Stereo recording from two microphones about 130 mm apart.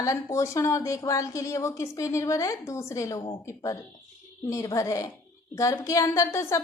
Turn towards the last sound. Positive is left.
turn(degrees=20)  # may be behind; listen again after turning